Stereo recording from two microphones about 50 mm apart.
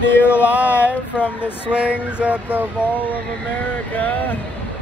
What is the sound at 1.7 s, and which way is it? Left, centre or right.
Speech, right.